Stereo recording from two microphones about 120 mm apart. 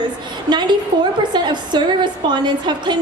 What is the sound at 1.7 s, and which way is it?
A woman's voice, 40° right (ahead or behind).